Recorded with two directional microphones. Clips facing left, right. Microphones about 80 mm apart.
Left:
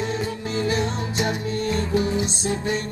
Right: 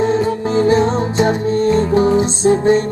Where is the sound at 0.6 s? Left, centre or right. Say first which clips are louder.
Right 11 dB; right.